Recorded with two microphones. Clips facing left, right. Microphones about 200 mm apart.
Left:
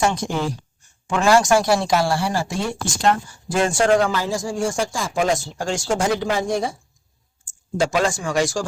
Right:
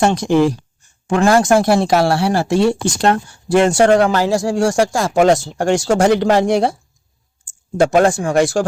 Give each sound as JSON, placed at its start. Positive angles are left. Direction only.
{"t": 0.0, "sound": "speech", "side_deg": -70}
{"t": 1.0, "sound": "speech", "side_deg": -55}
{"t": 7.8, "sound": "speech", "side_deg": -55}